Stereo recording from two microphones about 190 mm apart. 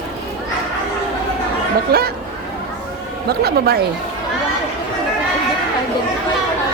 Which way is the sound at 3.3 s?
55° right (ahead or behind).